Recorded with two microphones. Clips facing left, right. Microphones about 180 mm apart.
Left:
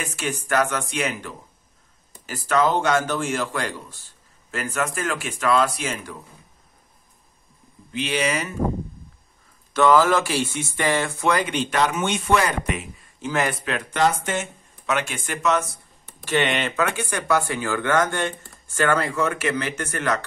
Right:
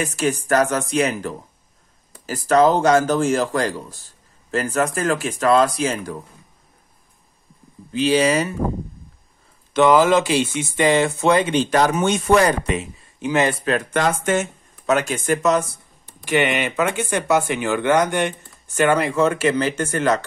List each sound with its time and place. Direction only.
0.0 s speech: 40° right (ahead or behind)
7.9 s speech: 35° right (ahead or behind)
9.8 s speech: 20° right (ahead or behind)
13.2 s speech: 20° right (ahead or behind)
13.6 s speech: 40° right (ahead or behind)
16.3 s speech: 10° right (ahead or behind)
16.7 s speech: 20° right (ahead or behind)